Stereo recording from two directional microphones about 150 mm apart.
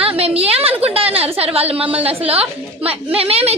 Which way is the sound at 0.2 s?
40° right (ahead or behind).